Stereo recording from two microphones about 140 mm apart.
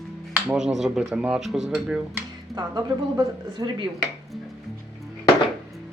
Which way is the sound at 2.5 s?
25° right (ahead or behind).